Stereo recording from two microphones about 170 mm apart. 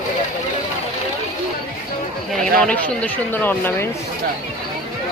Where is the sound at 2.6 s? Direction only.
10° left (ahead or behind).